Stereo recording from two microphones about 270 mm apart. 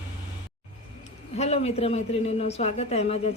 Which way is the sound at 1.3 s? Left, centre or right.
Left.